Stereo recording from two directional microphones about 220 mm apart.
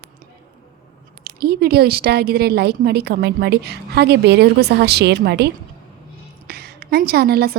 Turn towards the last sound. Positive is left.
turn(degrees=-45)  # may be behind; listen again after turning